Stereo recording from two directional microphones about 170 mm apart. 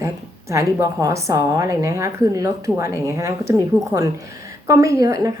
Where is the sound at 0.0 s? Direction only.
15° right (ahead or behind).